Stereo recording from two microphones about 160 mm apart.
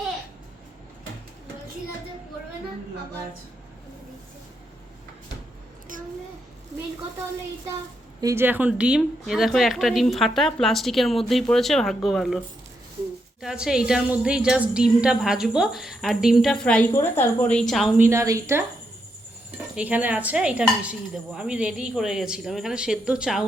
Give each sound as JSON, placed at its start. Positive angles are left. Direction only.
{"t": 8.2, "sound": "a woman's voice", "side_deg": -15}
{"t": 13.4, "sound": "a woman's voice", "side_deg": -5}
{"t": 18.0, "sound": "dishes", "side_deg": -15}
{"t": 19.7, "sound": "dishes", "side_deg": -10}
{"t": 21.2, "sound": "a woman's voice", "side_deg": -5}